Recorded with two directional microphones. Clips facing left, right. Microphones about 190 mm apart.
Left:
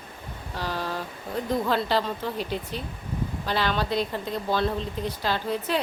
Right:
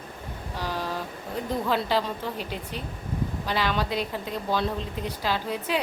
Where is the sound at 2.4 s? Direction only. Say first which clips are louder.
Left 3 dB; 40° left (ahead or behind).